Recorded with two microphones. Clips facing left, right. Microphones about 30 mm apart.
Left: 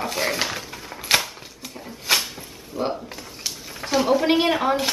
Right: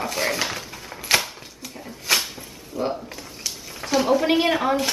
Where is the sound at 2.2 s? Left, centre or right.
Centre.